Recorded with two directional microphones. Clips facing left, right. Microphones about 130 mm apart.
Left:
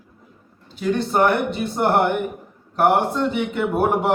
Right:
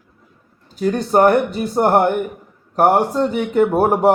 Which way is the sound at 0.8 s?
40° right (ahead or behind).